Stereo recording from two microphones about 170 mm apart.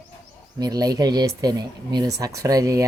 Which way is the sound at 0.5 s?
20° right (ahead or behind).